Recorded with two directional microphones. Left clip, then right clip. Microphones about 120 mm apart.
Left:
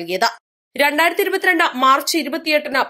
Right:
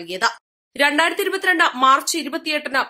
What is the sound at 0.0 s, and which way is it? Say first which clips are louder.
Speech: left 3 dB; 35° left (ahead or behind).